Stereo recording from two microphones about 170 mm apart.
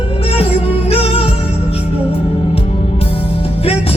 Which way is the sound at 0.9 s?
35° left (ahead or behind).